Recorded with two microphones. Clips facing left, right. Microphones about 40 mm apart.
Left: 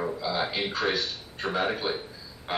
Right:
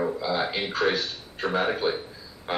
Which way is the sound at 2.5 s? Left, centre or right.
Centre.